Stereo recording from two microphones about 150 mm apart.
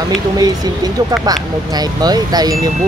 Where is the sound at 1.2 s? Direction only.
25° right (ahead or behind).